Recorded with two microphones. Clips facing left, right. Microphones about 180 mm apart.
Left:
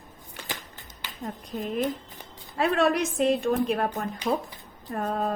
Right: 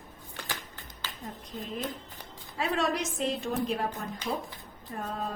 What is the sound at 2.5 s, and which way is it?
Speech, 60° left (ahead or behind).